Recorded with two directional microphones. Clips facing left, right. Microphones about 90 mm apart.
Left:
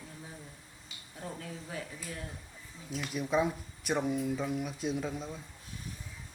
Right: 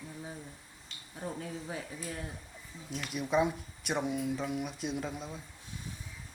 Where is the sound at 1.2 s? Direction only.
20° right (ahead or behind).